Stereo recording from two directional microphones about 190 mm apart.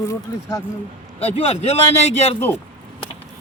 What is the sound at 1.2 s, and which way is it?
A man's voice, 30° left (ahead or behind).